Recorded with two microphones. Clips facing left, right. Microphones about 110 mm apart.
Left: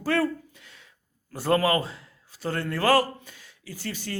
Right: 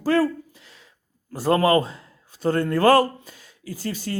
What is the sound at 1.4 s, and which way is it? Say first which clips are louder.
Speech: right 4 dB; 30° right (ahead or behind).